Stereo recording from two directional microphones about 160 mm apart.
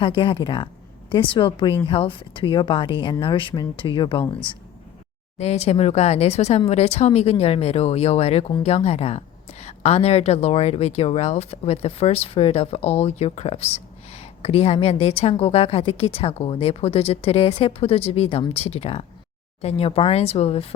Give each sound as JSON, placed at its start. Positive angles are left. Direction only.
{"t": 0.0, "sound": "a woman's voice", "side_deg": 30}
{"t": 5.4, "sound": "a woman's voice", "side_deg": 40}